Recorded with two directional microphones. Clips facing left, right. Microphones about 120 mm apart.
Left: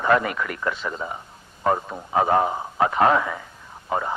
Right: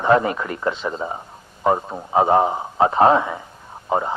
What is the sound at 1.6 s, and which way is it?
A man's voice, 20° right (ahead or behind).